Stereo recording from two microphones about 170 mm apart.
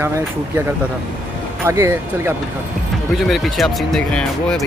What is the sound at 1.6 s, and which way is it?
Speech, 15° right (ahead or behind).